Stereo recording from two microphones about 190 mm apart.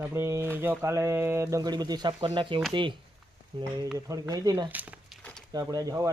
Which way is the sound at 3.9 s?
15° right (ahead or behind).